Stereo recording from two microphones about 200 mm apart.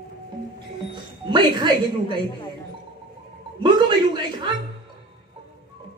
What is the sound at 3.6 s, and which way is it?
Speech, 20° right (ahead or behind).